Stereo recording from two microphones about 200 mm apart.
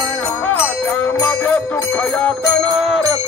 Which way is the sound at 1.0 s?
10° left (ahead or behind).